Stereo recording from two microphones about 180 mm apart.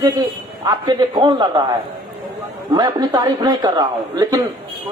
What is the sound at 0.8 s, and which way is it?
Speech, 25° right (ahead or behind).